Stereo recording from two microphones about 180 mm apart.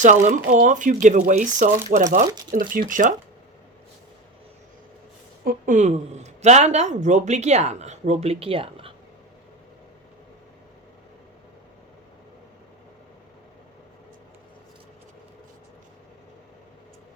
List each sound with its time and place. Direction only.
0.0 s speech: 45° right (ahead or behind)
5.5 s speech: 45° right (ahead or behind)